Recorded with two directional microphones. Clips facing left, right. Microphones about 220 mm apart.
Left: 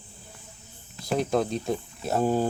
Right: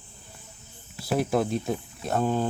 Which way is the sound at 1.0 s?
5° right (ahead or behind).